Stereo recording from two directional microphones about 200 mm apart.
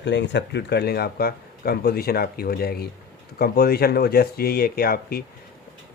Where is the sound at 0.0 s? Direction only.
60° left (ahead or behind).